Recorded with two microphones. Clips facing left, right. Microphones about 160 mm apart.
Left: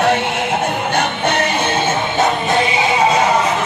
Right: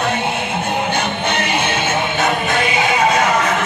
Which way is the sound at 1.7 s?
30° left (ahead or behind).